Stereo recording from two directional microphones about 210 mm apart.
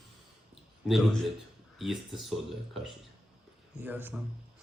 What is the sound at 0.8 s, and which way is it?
Speech, centre (ahead or behind).